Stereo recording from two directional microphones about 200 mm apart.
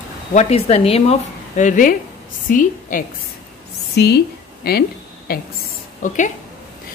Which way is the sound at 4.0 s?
55° left (ahead or behind).